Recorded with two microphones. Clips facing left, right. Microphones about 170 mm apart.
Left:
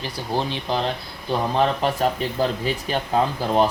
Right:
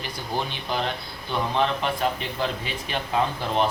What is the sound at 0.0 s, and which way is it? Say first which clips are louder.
Speech: left 4 dB; 30° left (ahead or behind).